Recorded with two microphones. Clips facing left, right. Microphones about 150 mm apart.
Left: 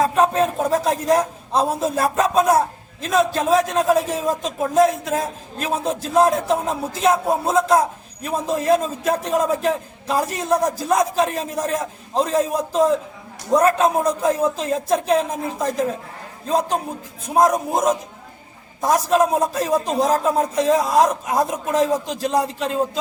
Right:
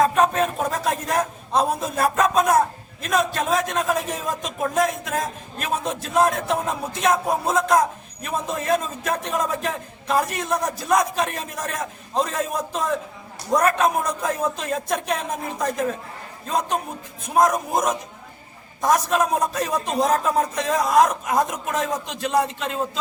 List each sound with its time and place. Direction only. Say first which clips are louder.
0.7 s a sound: left 6 dB; 35° left (ahead or behind)
1.5 s a man's voice: left 2 dB; 30° left (ahead or behind)
18.8 s a man's voice: left 3 dB; 30° left (ahead or behind)